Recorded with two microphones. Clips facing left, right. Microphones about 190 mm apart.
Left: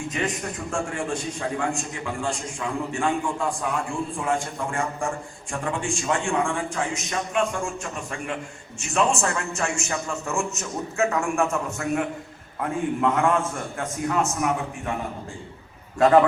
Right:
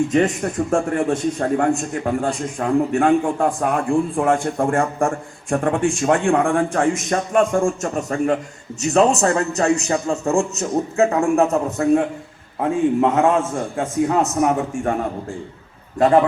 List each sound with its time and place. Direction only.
0.1 s a man's voice: 50° right (ahead or behind)